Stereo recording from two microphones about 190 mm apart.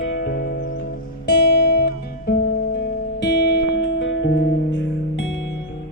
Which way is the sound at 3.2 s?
65° left (ahead or behind).